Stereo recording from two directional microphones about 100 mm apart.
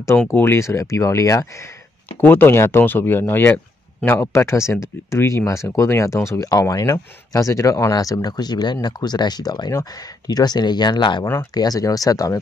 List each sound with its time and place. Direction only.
0.3 s speech: 25° left (ahead or behind)
2.0 s speech: 20° left (ahead or behind); by 11.2 s 50° left (ahead or behind)
11.5 s speech: 40° left (ahead or behind)